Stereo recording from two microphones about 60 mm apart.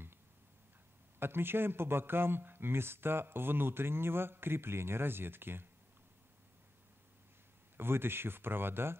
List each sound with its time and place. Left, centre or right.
1.2 s a man's voice: right
7.7 s a man's voice: right